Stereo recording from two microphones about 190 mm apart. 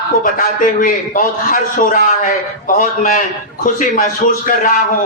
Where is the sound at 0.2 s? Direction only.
45° left (ahead or behind).